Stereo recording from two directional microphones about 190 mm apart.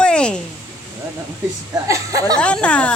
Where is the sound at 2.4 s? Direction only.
5° left (ahead or behind).